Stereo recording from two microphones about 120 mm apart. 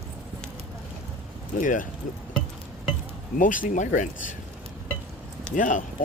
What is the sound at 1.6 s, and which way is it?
Speech, 90° left.